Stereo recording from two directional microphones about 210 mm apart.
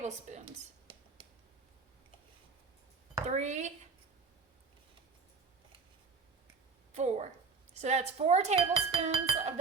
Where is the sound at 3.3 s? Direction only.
35° right (ahead or behind).